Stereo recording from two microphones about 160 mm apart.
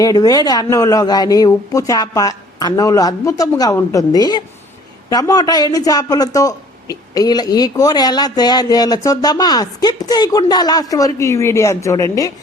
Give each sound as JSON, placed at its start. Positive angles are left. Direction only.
{"t": 0.0, "sound": "speech", "side_deg": 20}